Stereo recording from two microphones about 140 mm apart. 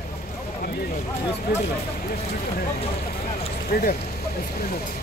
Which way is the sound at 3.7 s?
90° left.